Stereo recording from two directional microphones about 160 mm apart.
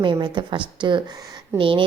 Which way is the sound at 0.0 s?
30° right (ahead or behind).